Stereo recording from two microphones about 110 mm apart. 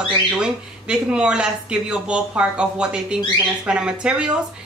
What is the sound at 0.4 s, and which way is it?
Speech, 10° right (ahead or behind).